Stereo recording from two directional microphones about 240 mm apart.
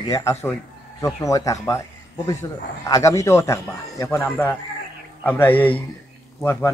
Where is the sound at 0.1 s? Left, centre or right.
Centre.